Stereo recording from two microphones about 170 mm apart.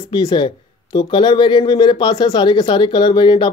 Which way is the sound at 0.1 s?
25° left (ahead or behind).